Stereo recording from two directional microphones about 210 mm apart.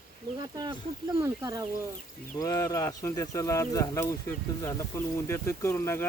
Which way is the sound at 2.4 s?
15° left (ahead or behind).